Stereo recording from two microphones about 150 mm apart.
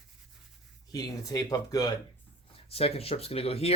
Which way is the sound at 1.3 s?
25° left (ahead or behind).